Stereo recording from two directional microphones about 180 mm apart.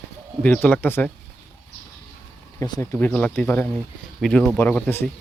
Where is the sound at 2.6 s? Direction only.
25° left (ahead or behind).